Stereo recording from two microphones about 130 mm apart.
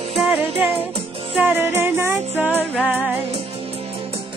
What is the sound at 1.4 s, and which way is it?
Music, 15° right (ahead or behind).